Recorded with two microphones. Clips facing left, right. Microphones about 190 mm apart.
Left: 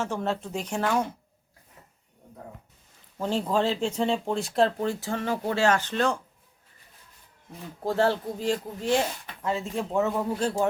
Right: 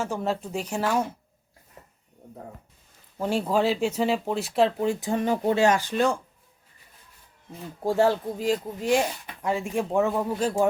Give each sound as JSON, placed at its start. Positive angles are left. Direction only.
{"t": 0.0, "sound": "speech", "side_deg": -10}
{"t": 3.2, "sound": "speech", "side_deg": -10}
{"t": 4.9, "sound": "speech", "side_deg": -15}
{"t": 7.8, "sound": "speech", "side_deg": -10}